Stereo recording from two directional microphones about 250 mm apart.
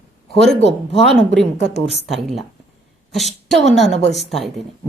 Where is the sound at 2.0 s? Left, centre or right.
Centre.